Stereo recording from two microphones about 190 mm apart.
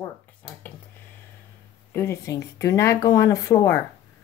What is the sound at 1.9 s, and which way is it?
Speech, 15° left (ahead or behind).